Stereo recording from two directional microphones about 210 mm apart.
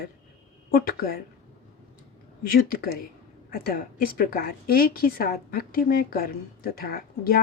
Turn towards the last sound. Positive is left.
turn(degrees=45)  # may be behind; listen again after turning